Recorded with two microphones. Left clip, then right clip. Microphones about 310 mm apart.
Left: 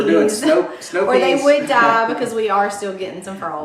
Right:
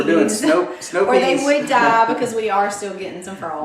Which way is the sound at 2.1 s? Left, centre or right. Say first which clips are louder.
Left 1 dB; centre.